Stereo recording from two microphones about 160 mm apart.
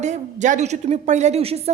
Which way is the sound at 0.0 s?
45° right (ahead or behind).